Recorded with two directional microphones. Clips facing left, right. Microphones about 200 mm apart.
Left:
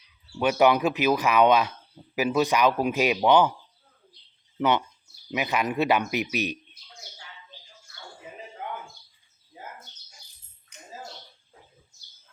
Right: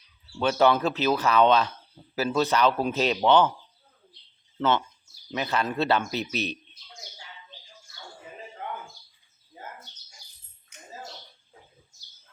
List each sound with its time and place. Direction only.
0.3 s speech: 15° left (ahead or behind)
4.5 s speech: 15° left (ahead or behind)